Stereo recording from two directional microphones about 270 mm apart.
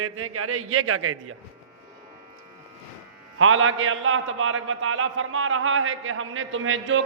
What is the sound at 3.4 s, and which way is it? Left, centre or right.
A man's voice, right.